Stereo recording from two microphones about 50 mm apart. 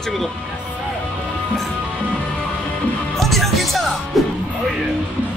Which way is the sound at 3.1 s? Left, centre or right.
Centre.